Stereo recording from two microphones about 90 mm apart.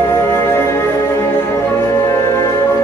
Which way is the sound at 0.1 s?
25° left (ahead or behind).